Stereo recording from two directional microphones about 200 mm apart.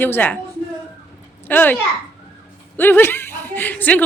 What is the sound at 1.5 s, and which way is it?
A woman's voice, 10° left (ahead or behind).